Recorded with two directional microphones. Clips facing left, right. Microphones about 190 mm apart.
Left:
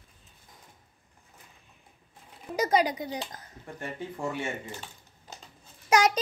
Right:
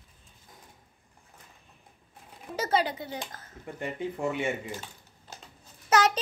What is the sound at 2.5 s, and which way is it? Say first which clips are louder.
Speech: left 3 dB; 15° left (ahead or behind).